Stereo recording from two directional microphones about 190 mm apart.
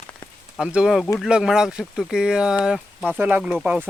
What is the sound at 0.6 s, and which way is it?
Speech, 5° right (ahead or behind).